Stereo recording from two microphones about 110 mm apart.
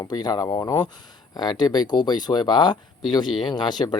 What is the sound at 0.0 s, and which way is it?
Speech, 40° left (ahead or behind).